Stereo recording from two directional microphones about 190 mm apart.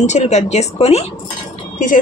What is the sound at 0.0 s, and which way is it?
A woman's voice, 35° left (ahead or behind).